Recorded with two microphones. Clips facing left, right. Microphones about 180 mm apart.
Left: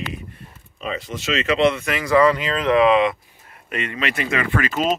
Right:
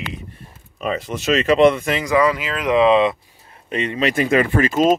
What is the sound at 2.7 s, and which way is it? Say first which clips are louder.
Speech: right 2 dB; 25° right (ahead or behind).